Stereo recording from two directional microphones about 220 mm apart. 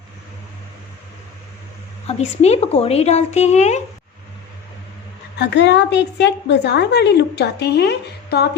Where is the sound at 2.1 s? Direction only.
30° left (ahead or behind).